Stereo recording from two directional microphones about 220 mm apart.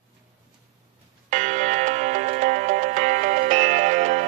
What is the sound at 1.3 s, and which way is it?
Music, 35° right (ahead or behind).